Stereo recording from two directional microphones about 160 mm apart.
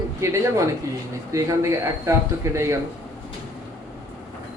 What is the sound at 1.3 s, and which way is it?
Speech, 20° right (ahead or behind).